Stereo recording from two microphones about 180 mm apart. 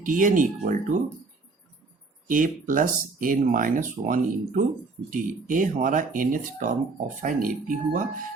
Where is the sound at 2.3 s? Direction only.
50° right (ahead or behind).